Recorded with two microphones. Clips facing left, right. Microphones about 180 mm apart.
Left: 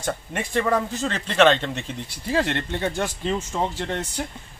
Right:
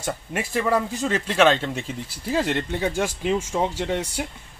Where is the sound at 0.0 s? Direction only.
5° right (ahead or behind).